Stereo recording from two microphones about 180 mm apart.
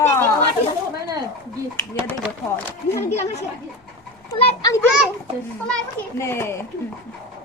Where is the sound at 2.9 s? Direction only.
15° left (ahead or behind).